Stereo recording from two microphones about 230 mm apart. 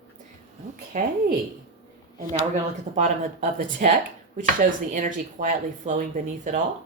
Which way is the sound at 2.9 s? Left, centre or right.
Right.